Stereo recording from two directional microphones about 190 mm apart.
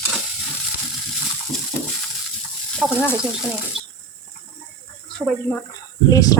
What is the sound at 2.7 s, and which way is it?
Speech, 5° left (ahead or behind).